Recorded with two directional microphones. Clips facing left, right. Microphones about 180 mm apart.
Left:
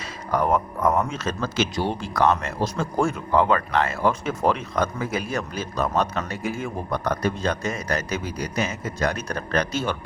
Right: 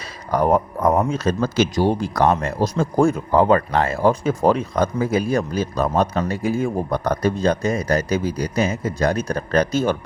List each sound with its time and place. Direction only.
0.3 s speech: 35° right (ahead or behind)